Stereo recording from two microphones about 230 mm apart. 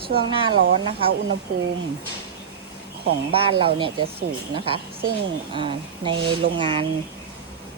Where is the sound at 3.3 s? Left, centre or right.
Right.